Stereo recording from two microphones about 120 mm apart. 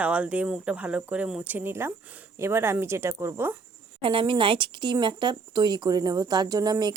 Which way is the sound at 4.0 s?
45° right (ahead or behind).